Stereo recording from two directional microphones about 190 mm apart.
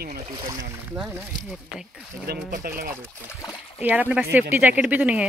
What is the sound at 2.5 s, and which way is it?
Speech, 50° right (ahead or behind).